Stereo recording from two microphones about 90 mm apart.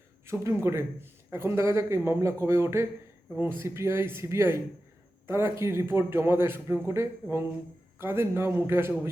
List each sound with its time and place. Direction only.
0.3 s a man's voice: 30° right (ahead or behind)